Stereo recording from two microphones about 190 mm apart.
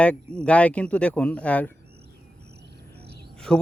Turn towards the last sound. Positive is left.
turn(degrees=5)  # may be behind; listen again after turning